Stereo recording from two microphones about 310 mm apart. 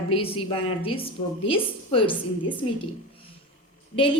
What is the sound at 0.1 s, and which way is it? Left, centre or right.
A woman's voice, centre.